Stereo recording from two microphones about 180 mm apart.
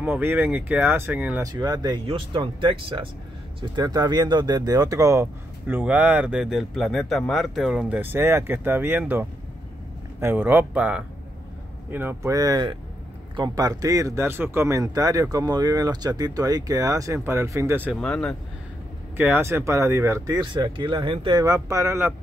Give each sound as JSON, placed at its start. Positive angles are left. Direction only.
{"t": 0.0, "sound": "speech", "side_deg": -10}
{"t": 1.5, "sound": "speech", "side_deg": -20}
{"t": 18.0, "sound": "speech", "side_deg": 5}
{"t": 19.1, "sound": "speech", "side_deg": -10}